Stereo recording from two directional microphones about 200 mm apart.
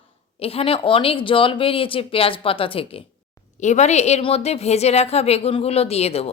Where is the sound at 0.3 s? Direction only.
30° left (ahead or behind).